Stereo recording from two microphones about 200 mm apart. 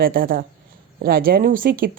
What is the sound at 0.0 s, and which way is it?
A woman's voice, 45° right (ahead or behind).